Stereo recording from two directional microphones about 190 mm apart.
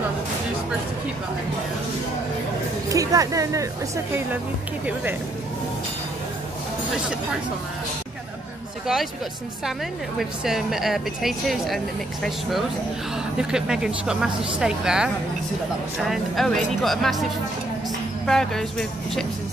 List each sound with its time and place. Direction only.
2.9 s a woman's voice: 20° right (ahead or behind)
9.7 s a woman's voice: centre (ahead or behind)